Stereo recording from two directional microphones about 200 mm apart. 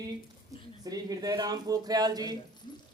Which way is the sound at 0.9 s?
20° right (ahead or behind).